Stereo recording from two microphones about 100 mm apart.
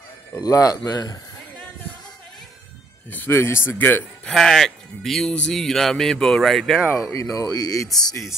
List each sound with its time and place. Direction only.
0.4 s speech: 35° left (ahead or behind)
3.1 s speech: 20° left (ahead or behind)
4.3 s speech: 5° left (ahead or behind)
7.0 s speech: 35° left (ahead or behind)